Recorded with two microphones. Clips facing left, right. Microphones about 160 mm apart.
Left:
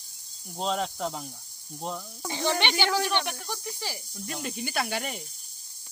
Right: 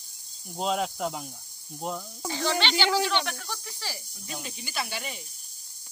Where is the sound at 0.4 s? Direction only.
5° right (ahead or behind).